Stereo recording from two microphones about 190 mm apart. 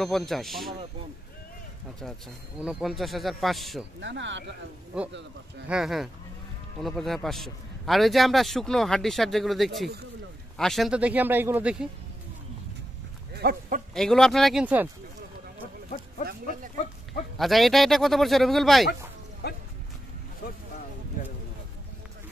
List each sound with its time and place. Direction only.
0.0 s a man's voice: centre (ahead or behind)
2.6 s a man's voice: centre (ahead or behind)
4.0 s speech: 70° right (ahead or behind)
4.9 s a man's voice: 5° right (ahead or behind)
13.3 s speech: 55° right (ahead or behind)
13.9 s a man's voice: centre (ahead or behind)
16.3 s speech: 45° right (ahead or behind)
17.4 s a man's voice: centre (ahead or behind)
19.4 s music: 55° left (ahead or behind)